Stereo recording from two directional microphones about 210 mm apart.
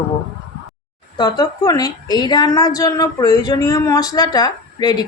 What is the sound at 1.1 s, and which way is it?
A woman's voice, 20° left (ahead or behind).